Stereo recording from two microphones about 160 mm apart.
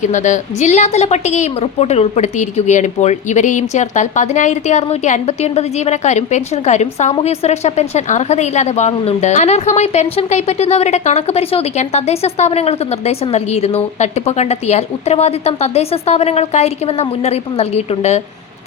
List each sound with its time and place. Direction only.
0.0 s a woman's voice: 50° left (ahead or behind)